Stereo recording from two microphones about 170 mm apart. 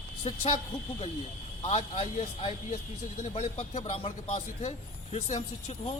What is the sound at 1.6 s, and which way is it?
Speech, 40° left (ahead or behind).